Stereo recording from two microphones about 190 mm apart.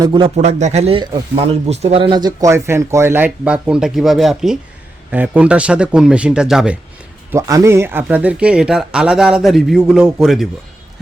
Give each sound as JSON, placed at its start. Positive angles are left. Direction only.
{"t": 0.0, "sound": "speech", "side_deg": -25}
{"t": 0.3, "sound": "speech", "side_deg": -35}
{"t": 7.3, "sound": "speech", "side_deg": -15}